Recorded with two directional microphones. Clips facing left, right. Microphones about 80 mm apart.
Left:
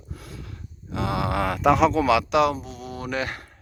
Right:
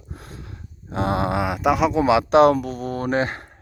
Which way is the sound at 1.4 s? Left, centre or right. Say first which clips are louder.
Left 3 dB; centre.